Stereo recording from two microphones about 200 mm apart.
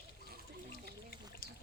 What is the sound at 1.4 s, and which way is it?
Pour, 45° left (ahead or behind).